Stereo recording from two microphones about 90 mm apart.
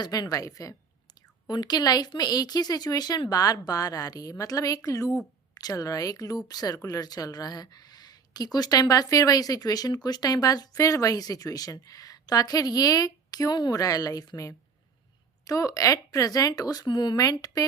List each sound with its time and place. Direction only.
0.0 s speech: 45° left (ahead or behind)
1.5 s speech: 50° left (ahead or behind)